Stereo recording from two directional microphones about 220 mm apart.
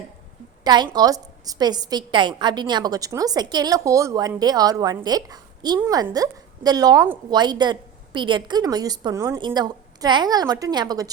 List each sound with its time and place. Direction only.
0.6 s a woman's voice: 20° right (ahead or behind)